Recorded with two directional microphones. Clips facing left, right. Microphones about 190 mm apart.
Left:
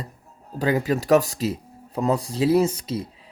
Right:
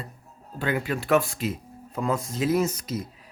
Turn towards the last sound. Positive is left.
turn(degrees=30)  # may be behind; listen again after turning